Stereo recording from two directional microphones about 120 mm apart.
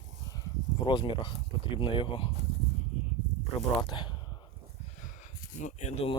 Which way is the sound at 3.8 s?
40° left (ahead or behind).